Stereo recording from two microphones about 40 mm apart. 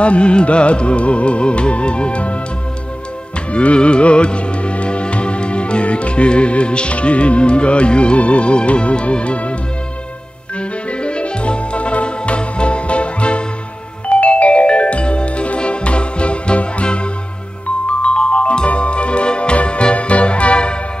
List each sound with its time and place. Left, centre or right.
0.0 s music: left
3.5 s music: left
10.9 s music: left